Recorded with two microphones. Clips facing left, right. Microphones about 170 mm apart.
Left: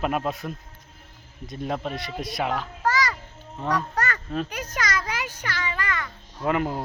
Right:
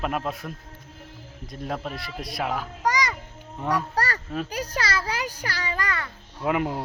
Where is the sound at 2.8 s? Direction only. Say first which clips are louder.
Even; 20° right (ahead or behind).